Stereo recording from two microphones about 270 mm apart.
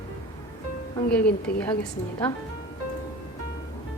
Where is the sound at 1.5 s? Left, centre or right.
Left.